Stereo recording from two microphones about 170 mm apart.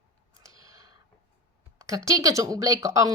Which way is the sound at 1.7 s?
20° right (ahead or behind).